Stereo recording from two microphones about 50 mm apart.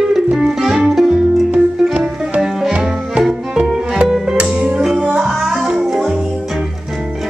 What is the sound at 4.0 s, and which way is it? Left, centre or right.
Music, centre.